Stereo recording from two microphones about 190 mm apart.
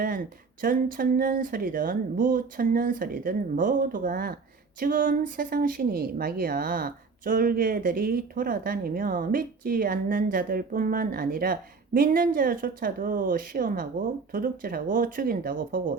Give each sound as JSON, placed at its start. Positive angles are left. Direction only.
{"t": 0.6, "sound": "a woman's voice", "side_deg": -50}